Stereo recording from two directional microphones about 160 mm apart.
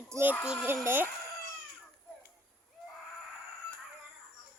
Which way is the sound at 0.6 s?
15° right (ahead or behind).